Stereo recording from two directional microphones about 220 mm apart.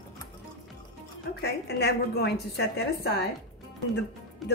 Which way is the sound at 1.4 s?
50° left (ahead or behind).